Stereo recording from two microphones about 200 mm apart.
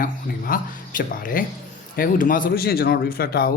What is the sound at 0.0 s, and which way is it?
Speech, 45° left (ahead or behind).